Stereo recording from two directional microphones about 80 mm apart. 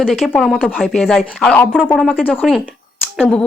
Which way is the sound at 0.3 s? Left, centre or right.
Centre.